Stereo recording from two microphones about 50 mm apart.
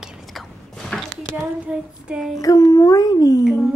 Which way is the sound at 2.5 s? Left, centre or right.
Left.